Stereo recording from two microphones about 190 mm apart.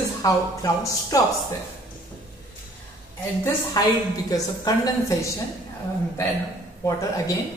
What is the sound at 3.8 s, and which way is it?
A woman's voice, 20° left (ahead or behind).